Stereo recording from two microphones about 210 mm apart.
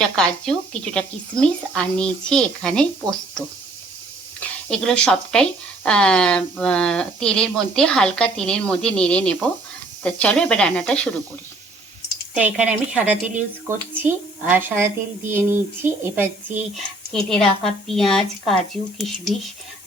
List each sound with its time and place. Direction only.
0.0 s speech: 5° left (ahead or behind)
12.3 s speech: 5° right (ahead or behind)
16.7 s speech: centre (ahead or behind)